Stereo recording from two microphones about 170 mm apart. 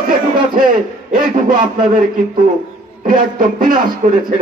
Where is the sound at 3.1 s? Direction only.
55° right (ahead or behind).